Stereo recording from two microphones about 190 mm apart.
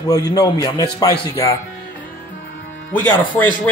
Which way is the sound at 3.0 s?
10° left (ahead or behind).